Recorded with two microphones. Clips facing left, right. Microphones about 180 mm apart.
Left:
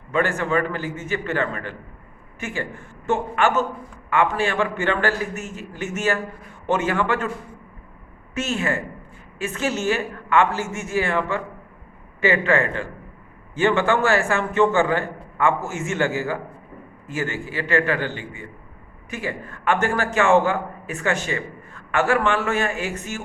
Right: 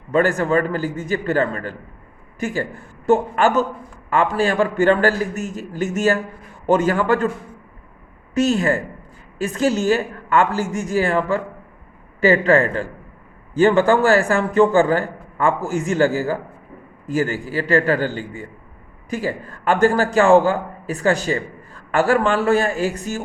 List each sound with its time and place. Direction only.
0.1 s a man's voice: 40° right (ahead or behind)
8.4 s a man's voice: 35° right (ahead or behind)